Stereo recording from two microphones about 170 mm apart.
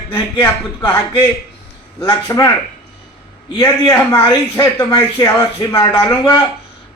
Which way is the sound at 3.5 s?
15° left (ahead or behind).